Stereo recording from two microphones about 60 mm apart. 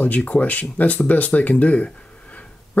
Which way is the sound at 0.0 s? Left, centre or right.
Left.